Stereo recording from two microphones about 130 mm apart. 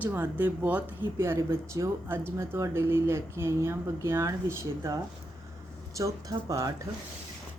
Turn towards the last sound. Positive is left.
turn(degrees=-25)  # may be behind; listen again after turning